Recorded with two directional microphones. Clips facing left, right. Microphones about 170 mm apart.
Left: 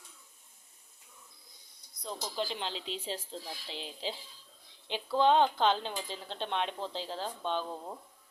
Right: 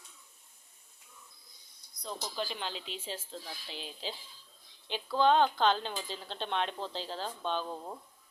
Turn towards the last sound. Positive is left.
turn(degrees=0)  # may be behind; listen again after turning